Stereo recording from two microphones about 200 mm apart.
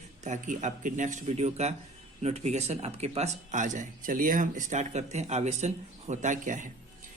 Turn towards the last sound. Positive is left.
turn(degrees=-40)  # may be behind; listen again after turning